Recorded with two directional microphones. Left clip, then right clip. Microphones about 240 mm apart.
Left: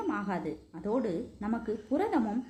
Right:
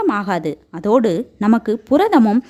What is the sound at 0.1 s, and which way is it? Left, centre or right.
Speech, right.